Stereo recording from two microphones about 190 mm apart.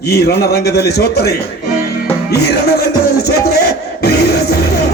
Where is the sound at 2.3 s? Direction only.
60° left (ahead or behind).